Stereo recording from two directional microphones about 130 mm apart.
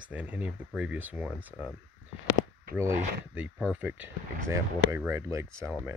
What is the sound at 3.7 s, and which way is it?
Speech, 15° right (ahead or behind).